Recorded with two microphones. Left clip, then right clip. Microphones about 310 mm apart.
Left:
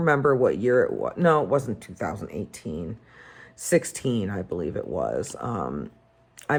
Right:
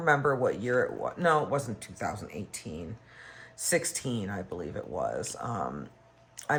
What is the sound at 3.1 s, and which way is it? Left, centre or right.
Speech, centre.